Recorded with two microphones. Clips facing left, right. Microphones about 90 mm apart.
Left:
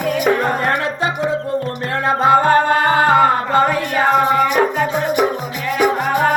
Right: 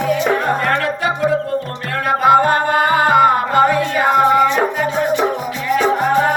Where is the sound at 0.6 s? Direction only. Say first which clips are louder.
Right 1 dB; 20° left (ahead or behind).